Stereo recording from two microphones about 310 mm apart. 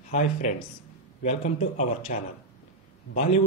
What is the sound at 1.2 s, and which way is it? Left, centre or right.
Speech, left.